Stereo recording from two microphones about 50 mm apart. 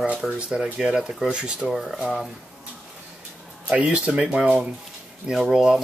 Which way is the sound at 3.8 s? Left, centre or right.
Right.